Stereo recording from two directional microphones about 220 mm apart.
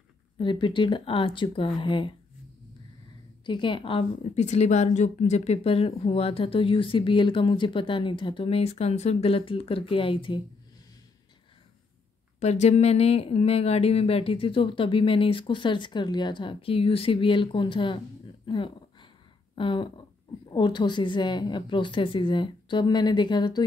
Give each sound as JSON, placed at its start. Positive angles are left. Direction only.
{"t": 0.4, "sound": "a woman's voice", "side_deg": 20}
{"t": 3.4, "sound": "a woman's voice", "side_deg": 20}
{"t": 12.4, "sound": "a woman's voice", "side_deg": 30}
{"t": 19.5, "sound": "a sound", "side_deg": 20}
{"t": 20.4, "sound": "a woman's voice", "side_deg": 20}